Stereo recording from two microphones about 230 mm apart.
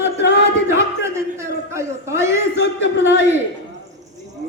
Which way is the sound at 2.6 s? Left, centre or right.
Left.